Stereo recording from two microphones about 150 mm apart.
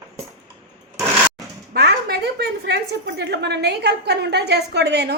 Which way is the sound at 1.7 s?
90° right.